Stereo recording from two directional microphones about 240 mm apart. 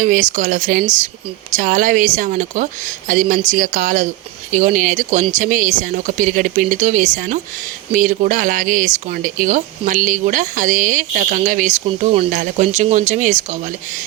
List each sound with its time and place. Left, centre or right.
0.0 s speech: right